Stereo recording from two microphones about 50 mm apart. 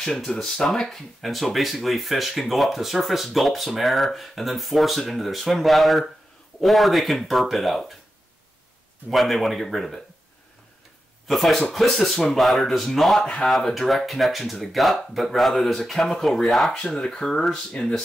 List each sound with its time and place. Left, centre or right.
0.0 s speech: centre
9.1 s speech: centre
11.2 s speech: centre
16.7 s speech: centre
17.7 s speech: centre